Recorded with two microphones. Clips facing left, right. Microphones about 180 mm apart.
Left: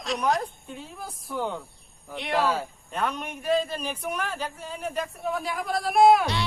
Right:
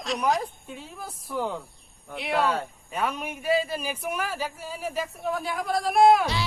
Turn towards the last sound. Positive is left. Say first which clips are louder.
# even
turn(degrees=0)  # may be behind; listen again after turning